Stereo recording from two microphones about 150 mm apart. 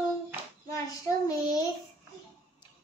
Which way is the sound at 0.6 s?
25° left (ahead or behind).